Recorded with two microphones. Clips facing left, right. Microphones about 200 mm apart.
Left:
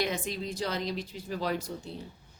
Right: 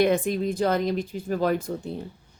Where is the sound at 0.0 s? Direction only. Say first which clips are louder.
Right 10 dB; 55° right (ahead or behind).